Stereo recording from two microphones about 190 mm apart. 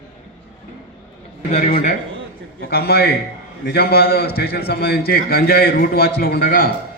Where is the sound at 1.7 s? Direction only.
50° left (ahead or behind).